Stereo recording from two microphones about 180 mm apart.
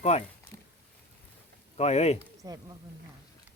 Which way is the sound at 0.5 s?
15° left (ahead or behind).